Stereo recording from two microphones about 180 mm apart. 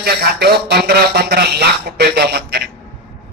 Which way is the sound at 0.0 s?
60° right (ahead or behind).